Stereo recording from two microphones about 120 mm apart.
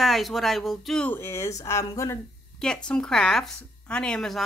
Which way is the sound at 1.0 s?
20° left (ahead or behind).